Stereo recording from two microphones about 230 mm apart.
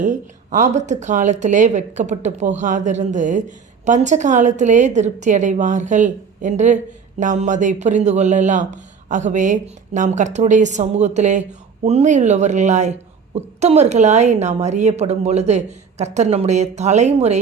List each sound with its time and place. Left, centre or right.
0.0 s a woman's voice: right